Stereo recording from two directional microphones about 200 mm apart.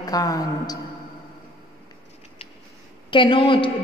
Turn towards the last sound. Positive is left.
turn(degrees=25)  # may be behind; listen again after turning